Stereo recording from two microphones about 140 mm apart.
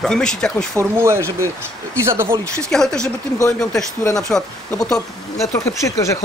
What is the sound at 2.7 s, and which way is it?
A man's voice, 5° left (ahead or behind).